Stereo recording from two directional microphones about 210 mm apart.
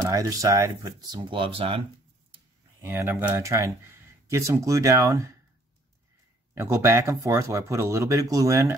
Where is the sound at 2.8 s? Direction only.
10° right (ahead or behind).